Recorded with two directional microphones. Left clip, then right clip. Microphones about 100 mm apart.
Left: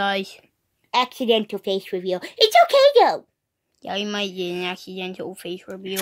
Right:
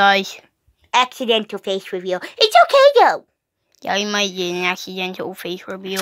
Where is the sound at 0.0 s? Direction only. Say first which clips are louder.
Right 9 dB; 20° right (ahead or behind).